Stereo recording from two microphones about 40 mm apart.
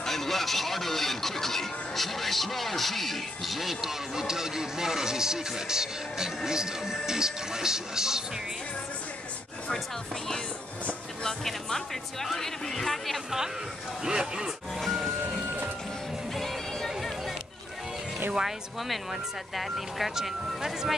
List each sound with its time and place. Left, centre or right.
0.0 s speech: centre
11.2 s speech: centre
14.0 s speech: centre
14.8 s music: centre
19.5 s speech: centre